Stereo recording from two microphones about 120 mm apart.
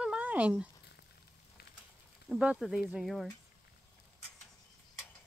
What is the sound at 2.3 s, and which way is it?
Sizzle, 5° right (ahead or behind).